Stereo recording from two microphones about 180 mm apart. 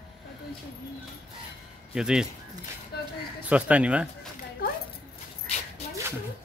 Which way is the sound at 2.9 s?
65° left (ahead or behind).